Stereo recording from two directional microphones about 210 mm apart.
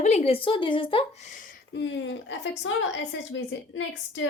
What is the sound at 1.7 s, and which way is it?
A woman's voice, 60° left (ahead or behind).